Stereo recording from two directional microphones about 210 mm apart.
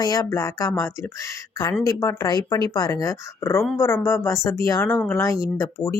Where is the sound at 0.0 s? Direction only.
15° left (ahead or behind).